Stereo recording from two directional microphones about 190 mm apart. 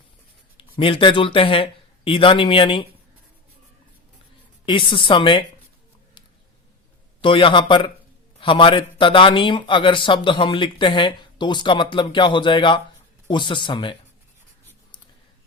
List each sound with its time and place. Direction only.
0.5 s speech: 25° left (ahead or behind)
4.6 s a man's voice: 25° left (ahead or behind)
7.2 s a man's voice: 25° left (ahead or behind)